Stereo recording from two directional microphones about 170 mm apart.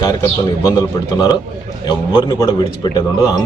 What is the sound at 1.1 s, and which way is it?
Speech, 25° left (ahead or behind).